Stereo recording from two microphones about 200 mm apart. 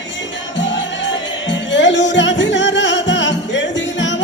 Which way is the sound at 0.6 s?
65° left (ahead or behind).